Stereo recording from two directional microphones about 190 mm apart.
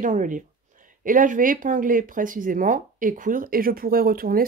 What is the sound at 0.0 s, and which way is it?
Speech, 45° right (ahead or behind).